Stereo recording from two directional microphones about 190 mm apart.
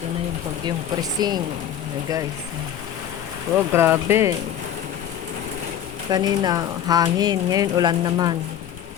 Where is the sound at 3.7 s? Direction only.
10° right (ahead or behind).